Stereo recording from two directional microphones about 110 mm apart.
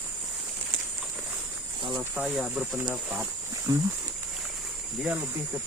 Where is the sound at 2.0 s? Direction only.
10° right (ahead or behind).